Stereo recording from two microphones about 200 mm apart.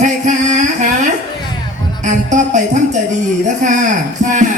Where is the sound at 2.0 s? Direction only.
40° right (ahead or behind).